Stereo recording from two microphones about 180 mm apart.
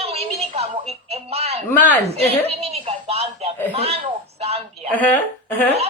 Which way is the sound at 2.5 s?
35° right (ahead or behind).